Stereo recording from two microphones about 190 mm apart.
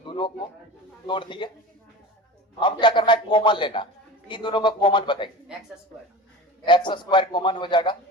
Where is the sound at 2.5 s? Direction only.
25° left (ahead or behind).